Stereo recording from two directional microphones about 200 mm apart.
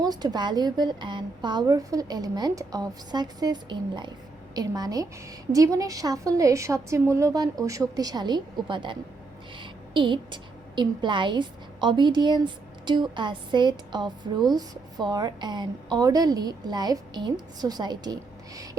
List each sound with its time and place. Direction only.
0.0 s a woman's voice: 20° right (ahead or behind)